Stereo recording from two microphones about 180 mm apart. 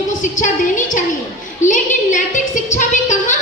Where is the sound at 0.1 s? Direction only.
45° left (ahead or behind).